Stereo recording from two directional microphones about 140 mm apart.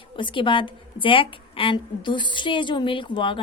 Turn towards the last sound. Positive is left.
turn(degrees=35)  # may be behind; listen again after turning